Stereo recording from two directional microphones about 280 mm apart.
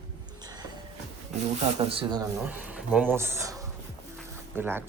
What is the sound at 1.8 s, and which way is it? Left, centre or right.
Speech, centre.